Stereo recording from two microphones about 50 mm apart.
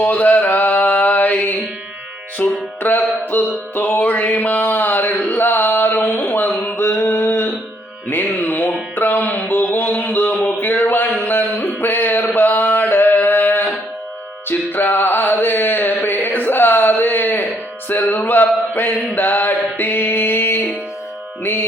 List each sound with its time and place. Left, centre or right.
0.0 s a sound: left
2.4 s music: left
6.7 s a sound: left
8.1 s music: left
9.5 s mantra: left
10.0 s a sound: left
11.2 s mantra: left
14.7 s music: left
18.7 s mantra: left
21.4 s music: left